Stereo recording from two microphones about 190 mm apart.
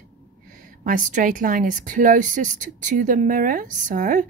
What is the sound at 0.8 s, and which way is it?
Speech, 45° right (ahead or behind).